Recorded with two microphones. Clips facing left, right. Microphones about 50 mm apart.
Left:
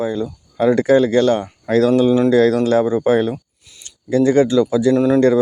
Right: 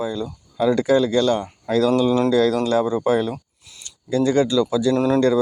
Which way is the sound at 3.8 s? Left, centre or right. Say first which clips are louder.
Left 5 dB; left.